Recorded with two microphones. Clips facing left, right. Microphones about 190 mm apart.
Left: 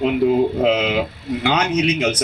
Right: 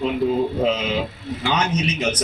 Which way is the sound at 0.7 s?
65° left (ahead or behind).